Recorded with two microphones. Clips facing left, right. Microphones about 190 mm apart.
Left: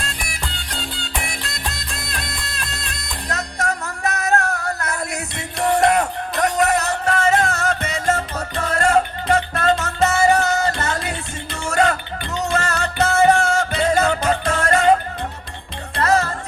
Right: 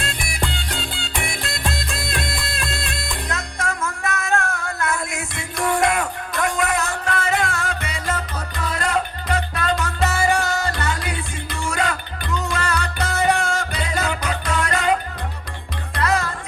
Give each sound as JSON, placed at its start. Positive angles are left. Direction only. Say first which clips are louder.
{"t": 0.0, "sound": "music", "louder": "right 4 dB", "side_deg": 40}
{"t": 16.0, "sound": "music", "louder": "left 3 dB", "side_deg": 45}